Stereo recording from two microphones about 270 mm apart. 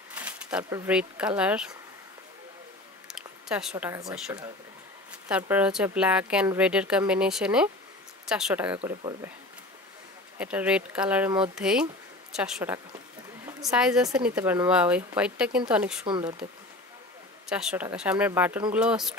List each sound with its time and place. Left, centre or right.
0.1 s speech: centre
3.1 s a sound: centre
3.7 s speech: centre
10.4 s speech: centre
16.1 s speech: centre
17.5 s speech: centre